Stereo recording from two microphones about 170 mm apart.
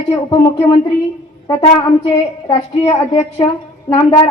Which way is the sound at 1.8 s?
30° left (ahead or behind).